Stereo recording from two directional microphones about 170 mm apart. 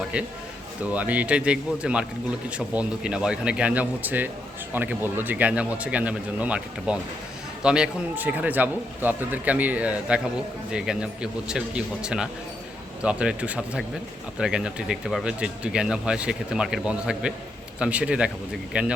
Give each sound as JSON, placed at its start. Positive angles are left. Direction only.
{"t": 0.9, "sound": "a man's voice", "side_deg": -10}